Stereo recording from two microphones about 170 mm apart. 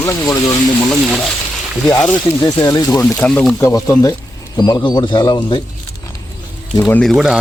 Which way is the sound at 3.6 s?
20° left (ahead or behind).